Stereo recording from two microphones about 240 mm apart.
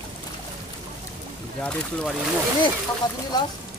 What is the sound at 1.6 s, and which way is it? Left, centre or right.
Speech, centre.